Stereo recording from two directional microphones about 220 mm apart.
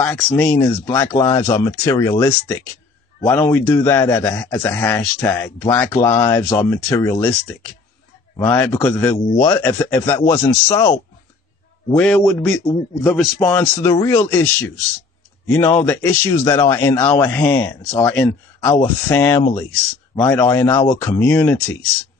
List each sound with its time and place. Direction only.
0.0 s speech: 5° left (ahead or behind)